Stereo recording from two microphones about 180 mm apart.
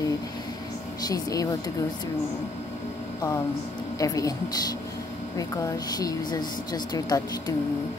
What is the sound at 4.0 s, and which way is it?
Speech, 20° left (ahead or behind).